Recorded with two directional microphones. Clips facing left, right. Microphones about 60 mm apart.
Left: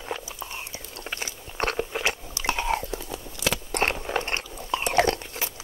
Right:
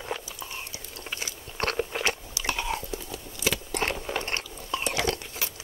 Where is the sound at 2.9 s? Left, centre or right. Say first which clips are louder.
Left 2 dB; left.